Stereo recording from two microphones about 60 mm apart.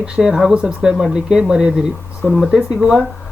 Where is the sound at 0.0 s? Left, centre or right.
Centre.